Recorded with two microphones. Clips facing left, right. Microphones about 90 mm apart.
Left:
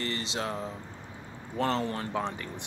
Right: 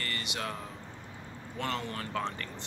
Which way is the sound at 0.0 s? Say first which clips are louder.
Left 4 dB; 25° left (ahead or behind).